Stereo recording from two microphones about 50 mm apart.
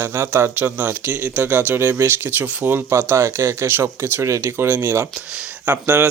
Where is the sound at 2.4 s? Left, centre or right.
Right.